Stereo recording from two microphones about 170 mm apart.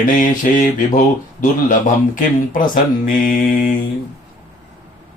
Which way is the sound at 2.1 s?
55° left (ahead or behind).